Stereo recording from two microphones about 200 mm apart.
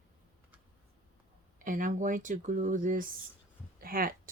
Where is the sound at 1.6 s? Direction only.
40° right (ahead or behind).